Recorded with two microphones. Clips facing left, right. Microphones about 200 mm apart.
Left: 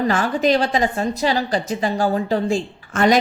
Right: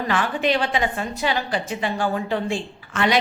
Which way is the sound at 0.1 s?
40° left (ahead or behind).